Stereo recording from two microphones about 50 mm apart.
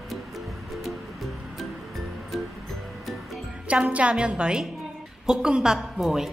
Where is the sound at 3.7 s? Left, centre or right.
Right; by 6.3 s centre.